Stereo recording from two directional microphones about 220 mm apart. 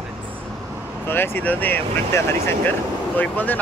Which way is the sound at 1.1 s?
10° left (ahead or behind).